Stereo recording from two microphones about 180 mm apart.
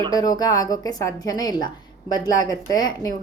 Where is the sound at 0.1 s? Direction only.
20° left (ahead or behind).